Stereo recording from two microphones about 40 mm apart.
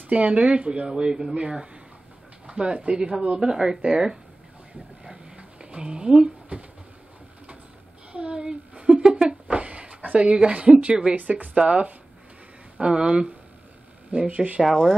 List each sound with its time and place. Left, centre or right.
0.1 s speech: right; by 4.2 s centre
5.0 s a sound: right
8.1 s a sound: right
10.1 s speech: right
11.1 s speech: right
11.5 s speech: right
14.1 s speech: right
14.6 s speech: centre